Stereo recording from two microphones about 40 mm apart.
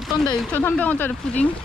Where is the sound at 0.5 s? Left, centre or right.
Left.